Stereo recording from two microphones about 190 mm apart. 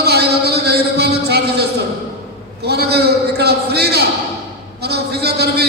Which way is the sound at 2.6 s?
60° right (ahead or behind).